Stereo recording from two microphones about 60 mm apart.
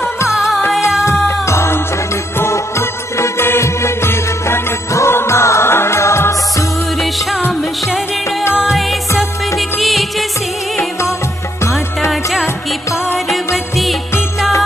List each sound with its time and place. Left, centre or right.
0.3 s music: centre
1.5 s music: left
9.6 s music: centre
12.1 s music: centre